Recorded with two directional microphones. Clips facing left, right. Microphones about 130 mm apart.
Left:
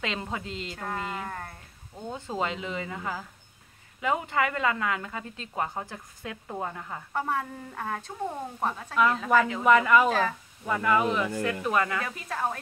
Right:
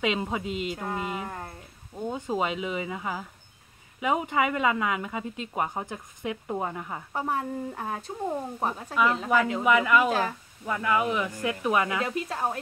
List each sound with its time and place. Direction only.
0.0 s speech: 15° right (ahead or behind)